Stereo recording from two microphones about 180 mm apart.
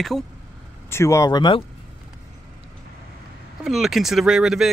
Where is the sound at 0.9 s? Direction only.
15° left (ahead or behind).